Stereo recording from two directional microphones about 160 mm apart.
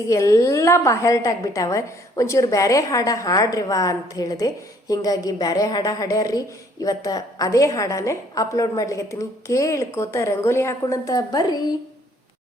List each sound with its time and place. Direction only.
0.1 s a woman's voice: 20° left (ahead or behind)